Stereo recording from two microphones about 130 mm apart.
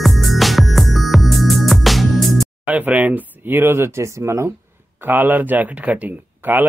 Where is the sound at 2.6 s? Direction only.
10° right (ahead or behind).